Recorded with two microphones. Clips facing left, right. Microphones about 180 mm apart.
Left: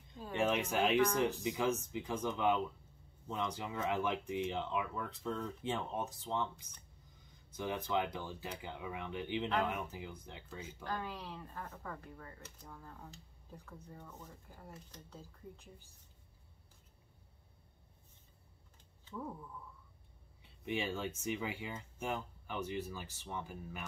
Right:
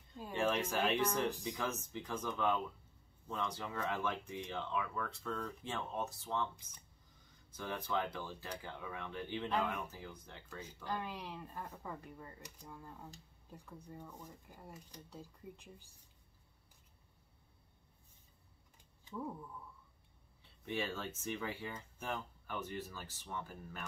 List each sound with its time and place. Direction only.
0.4 s speech: 10° left (ahead or behind)
7.5 s speech: 15° left (ahead or behind)
10.8 s speech: 15° right (ahead or behind)
19.0 s speech: 10° right (ahead or behind)
20.6 s speech: 15° left (ahead or behind)